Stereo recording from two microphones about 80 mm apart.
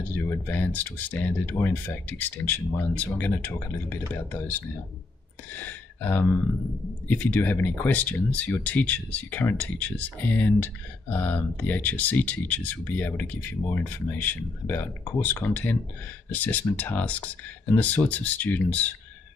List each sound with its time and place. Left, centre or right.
0.0 s speech: left
5.5 s gasp: left
7.1 s speech: centre